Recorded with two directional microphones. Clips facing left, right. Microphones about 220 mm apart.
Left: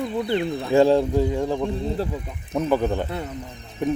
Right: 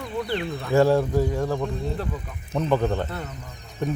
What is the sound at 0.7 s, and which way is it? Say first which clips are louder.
A man's voice: left 2 dB; 15° left (ahead or behind).